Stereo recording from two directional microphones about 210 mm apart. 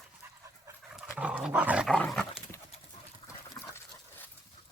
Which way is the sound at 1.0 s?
5° right (ahead or behind).